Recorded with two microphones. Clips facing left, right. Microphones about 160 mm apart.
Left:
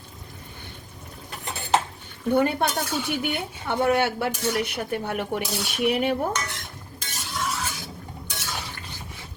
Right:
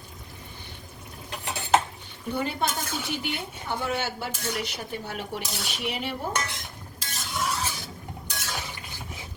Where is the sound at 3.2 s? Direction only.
60° left (ahead or behind).